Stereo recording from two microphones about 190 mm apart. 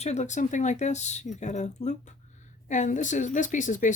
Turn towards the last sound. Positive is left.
turn(degrees=40)  # may be behind; listen again after turning